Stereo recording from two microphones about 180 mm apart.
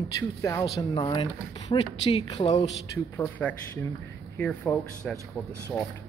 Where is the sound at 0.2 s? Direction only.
15° left (ahead or behind); by 2.7 s 35° left (ahead or behind).